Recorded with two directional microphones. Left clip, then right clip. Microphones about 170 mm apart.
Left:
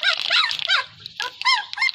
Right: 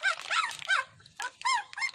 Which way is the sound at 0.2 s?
25° right (ahead or behind).